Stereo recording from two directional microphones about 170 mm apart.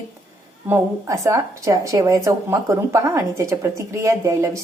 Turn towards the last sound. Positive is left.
turn(degrees=-20)  # may be behind; listen again after turning